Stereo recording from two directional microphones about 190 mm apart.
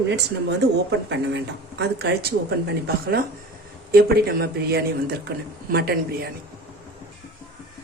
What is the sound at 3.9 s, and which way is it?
Speech, 55° right (ahead or behind).